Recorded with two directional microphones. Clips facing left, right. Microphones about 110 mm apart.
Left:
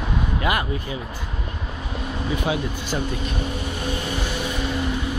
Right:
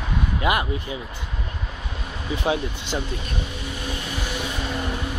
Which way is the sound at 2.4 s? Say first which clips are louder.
Even; 25° right (ahead or behind).